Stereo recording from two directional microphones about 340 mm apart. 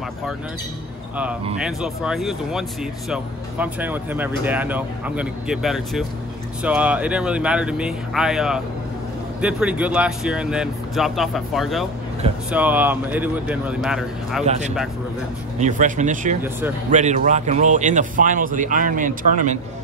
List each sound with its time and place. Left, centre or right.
1.6 s speech: centre
14.4 s speech: centre